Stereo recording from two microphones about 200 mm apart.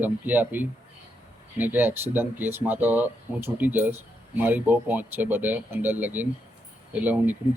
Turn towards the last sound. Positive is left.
turn(degrees=-10)  # may be behind; listen again after turning